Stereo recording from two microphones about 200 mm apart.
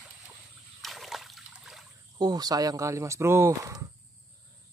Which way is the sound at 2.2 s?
20° right (ahead or behind).